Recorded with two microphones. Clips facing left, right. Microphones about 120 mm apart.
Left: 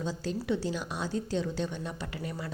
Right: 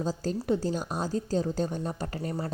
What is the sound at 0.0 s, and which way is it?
A woman's voice, 40° right (ahead or behind).